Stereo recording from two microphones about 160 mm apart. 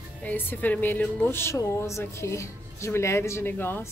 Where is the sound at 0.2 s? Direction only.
10° left (ahead or behind).